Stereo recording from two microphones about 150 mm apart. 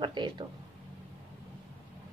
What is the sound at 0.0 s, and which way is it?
Speech, 30° right (ahead or behind).